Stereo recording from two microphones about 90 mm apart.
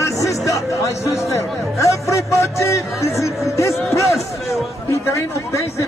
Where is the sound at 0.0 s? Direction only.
35° left (ahead or behind).